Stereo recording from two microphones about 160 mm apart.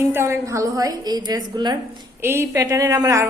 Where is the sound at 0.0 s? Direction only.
15° right (ahead or behind).